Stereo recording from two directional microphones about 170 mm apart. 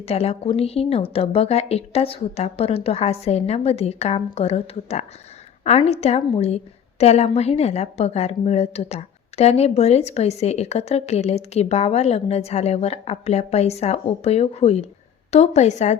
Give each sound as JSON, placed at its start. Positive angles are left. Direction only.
{"t": 0.0, "sound": "a woman's voice", "side_deg": 35}